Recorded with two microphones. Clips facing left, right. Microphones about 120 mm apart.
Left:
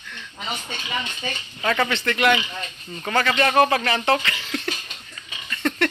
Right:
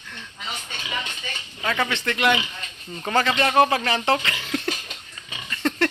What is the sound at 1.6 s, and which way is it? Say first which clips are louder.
Speech: left 3 dB; 5° right (ahead or behind).